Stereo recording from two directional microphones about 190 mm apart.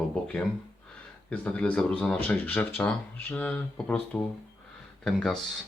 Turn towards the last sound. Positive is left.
turn(degrees=0)  # may be behind; listen again after turning